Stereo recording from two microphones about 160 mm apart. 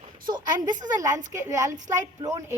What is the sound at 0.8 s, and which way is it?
Speech, 20° right (ahead or behind).